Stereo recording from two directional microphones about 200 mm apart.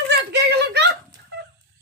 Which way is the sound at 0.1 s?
55° right (ahead or behind).